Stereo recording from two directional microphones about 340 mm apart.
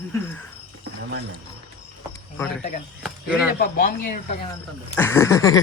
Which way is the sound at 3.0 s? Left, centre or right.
Centre.